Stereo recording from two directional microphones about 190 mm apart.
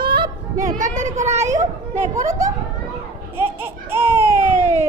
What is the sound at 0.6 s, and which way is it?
Speech, 40° right (ahead or behind).